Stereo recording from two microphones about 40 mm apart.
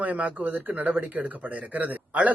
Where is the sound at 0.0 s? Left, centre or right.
Right.